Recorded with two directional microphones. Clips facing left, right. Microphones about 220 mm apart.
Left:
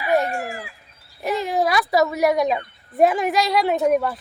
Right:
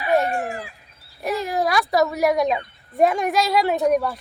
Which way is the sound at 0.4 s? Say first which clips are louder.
Right 2 dB; 30° right (ahead or behind).